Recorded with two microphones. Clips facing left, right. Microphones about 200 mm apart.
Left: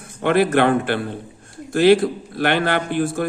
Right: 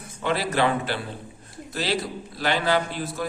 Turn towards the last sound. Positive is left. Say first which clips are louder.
# left 7 dB
turn(degrees=55)  # may be behind; listen again after turning